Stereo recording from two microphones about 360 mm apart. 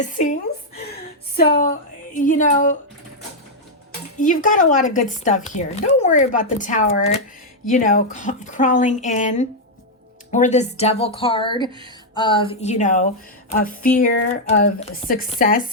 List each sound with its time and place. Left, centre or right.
0.0 s speech: centre
1.4 s speech: left
4.2 s speech: left